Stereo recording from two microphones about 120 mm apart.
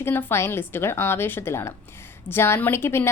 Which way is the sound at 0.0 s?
20° left (ahead or behind).